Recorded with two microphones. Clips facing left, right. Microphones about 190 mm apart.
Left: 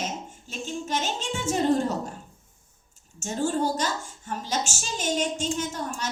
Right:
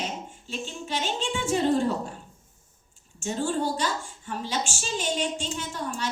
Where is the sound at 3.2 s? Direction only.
45° left (ahead or behind).